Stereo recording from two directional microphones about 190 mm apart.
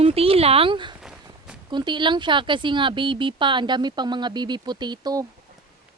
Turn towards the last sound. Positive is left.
turn(degrees=-20)  # may be behind; listen again after turning